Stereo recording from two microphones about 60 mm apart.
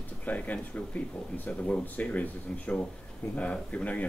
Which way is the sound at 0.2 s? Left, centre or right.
Left.